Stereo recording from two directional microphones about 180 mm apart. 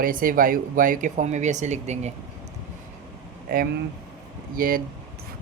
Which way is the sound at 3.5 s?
55° right (ahead or behind).